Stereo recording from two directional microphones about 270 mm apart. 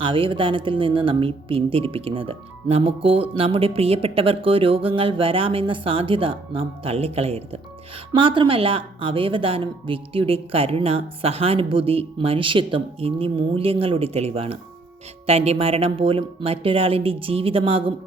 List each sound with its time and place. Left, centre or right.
0.0 s speech: centre